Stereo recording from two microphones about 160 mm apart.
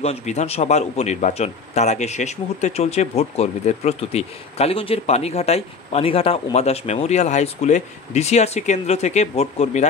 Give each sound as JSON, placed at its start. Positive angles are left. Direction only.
{"t": 0.0, "sound": "speech", "side_deg": 45}